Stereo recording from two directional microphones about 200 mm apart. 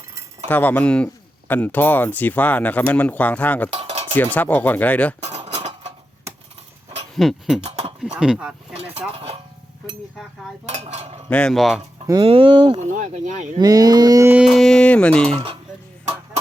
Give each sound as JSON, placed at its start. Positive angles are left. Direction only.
{"t": 0.4, "sound": "speech", "side_deg": 10}
{"t": 3.7, "sound": "cutlery", "side_deg": -30}
{"t": 4.4, "sound": "speech", "side_deg": 10}
{"t": 5.2, "sound": "cutlery", "side_deg": -30}
{"t": 7.2, "sound": "speech", "side_deg": 0}
{"t": 7.6, "sound": "a sound", "side_deg": -30}
{"t": 8.0, "sound": "speech", "side_deg": -5}
{"t": 9.1, "sound": "speech", "side_deg": -30}
{"t": 10.7, "sound": "speech", "side_deg": -35}
{"t": 11.3, "sound": "speech", "side_deg": 5}
{"t": 12.0, "sound": "speech", "side_deg": -25}
{"t": 12.9, "sound": "speech", "side_deg": -40}
{"t": 13.6, "sound": "speech", "side_deg": -20}